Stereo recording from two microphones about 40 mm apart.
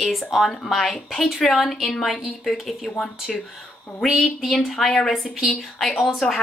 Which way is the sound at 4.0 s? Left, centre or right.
Centre.